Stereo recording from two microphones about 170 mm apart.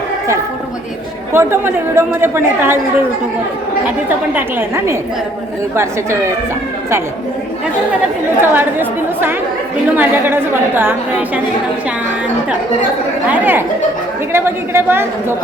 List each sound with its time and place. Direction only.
1.3 s a woman's voice: 15° right (ahead or behind)
4.4 s a woman's voice: 15° right (ahead or behind)
8.4 s a woman's voice: 10° right (ahead or behind)
13.3 s a woman's voice: 10° right (ahead or behind)